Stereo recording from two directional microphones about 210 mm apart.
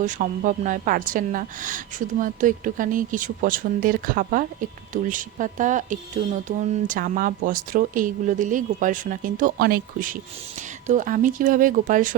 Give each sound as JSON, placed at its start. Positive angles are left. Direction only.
{"t": 0.0, "sound": "a woman's voice", "side_deg": -40}